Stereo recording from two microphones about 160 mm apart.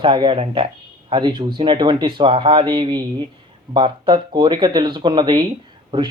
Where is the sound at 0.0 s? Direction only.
30° right (ahead or behind).